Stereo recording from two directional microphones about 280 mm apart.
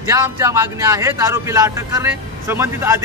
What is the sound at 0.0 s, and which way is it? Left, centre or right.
Speech, centre.